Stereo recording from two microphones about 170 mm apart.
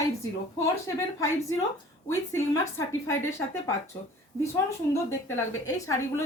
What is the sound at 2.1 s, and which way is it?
Speech, 15° left (ahead or behind).